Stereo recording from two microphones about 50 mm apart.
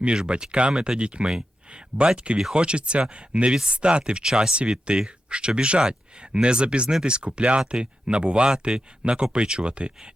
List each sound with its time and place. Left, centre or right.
0.0 s speech: right